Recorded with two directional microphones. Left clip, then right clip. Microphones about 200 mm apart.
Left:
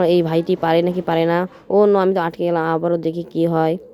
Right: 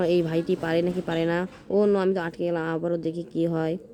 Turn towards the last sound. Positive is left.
turn(degrees=10)  # may be behind; listen again after turning